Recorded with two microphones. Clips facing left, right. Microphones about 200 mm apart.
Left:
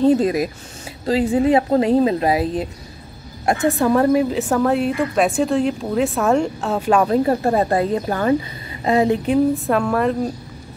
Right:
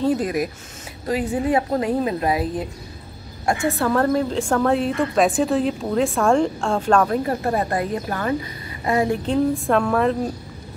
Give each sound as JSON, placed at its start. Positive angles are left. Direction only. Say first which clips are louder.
{"t": 0.0, "sound": "a woman's voice", "louder": "left 5 dB", "side_deg": 25}
{"t": 3.7, "sound": "a woman's voice", "louder": "left 5 dB", "side_deg": 15}
{"t": 7.1, "sound": "a woman's voice", "louder": "left 5 dB", "side_deg": 25}
{"t": 9.2, "sound": "a woman's voice", "louder": "left 3 dB", "side_deg": 5}